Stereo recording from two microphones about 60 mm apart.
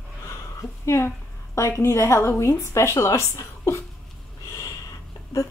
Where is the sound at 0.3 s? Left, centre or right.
Left.